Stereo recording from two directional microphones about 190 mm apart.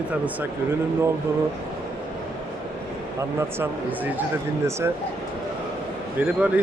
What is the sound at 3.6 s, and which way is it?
Speech, 10° right (ahead or behind).